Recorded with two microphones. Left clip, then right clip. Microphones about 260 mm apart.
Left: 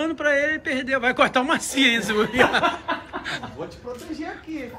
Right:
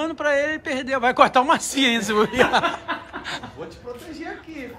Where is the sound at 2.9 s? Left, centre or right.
Left.